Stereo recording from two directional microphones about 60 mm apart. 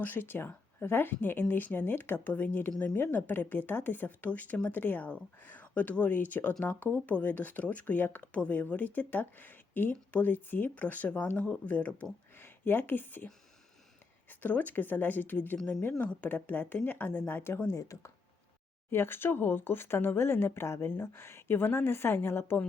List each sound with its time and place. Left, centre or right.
0.0 s speech: left
12.4 s a woman's voice: left
14.3 s speech: left
15.5 s speech: centre
15.8 s speech: left
17.7 s speech: left
18.9 s speech: left